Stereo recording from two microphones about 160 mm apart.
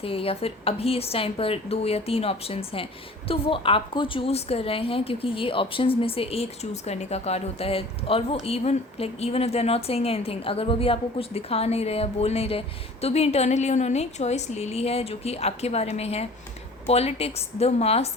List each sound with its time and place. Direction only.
0.0 s a woman's voice: 35° left (ahead or behind)